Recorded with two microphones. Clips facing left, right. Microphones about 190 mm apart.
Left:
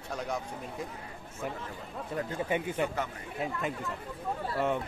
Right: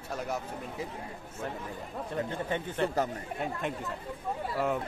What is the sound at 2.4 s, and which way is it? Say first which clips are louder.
Speech: left 2 dB; 10° left (ahead or behind).